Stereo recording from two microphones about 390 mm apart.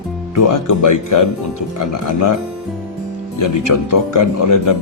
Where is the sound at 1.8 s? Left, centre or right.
Left.